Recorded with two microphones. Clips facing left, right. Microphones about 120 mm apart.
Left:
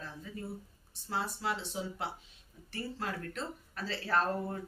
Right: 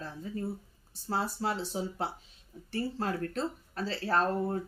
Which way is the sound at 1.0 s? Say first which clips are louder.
Right 3 dB; 35° right (ahead or behind).